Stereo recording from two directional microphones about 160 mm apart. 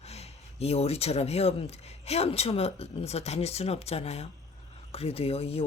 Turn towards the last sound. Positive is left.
turn(degrees=40)  # may be behind; listen again after turning